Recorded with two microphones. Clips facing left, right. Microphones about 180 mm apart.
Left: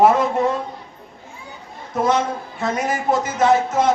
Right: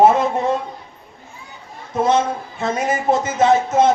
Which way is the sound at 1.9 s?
25° right (ahead or behind).